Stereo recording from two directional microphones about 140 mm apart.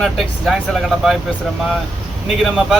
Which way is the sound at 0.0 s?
Centre (ahead or behind).